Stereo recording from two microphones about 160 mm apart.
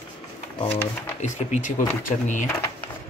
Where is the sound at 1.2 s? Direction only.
50° left (ahead or behind).